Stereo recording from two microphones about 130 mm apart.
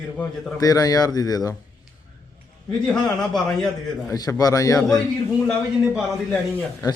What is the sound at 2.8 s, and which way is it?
Speech, 5° left (ahead or behind).